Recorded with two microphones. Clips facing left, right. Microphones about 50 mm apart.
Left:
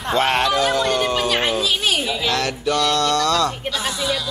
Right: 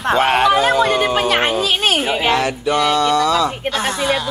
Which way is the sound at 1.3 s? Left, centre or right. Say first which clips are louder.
Right 3 dB; right.